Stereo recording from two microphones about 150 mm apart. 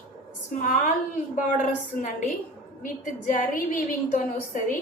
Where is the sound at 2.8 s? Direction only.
65° left (ahead or behind).